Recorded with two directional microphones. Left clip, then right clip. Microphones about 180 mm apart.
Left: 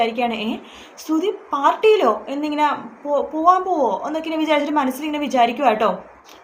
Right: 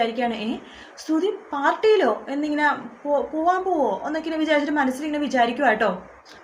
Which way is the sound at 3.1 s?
15° left (ahead or behind).